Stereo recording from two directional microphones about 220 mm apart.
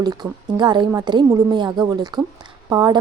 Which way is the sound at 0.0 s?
20° right (ahead or behind).